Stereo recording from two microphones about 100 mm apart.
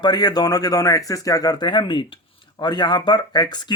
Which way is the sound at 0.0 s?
45° left (ahead or behind).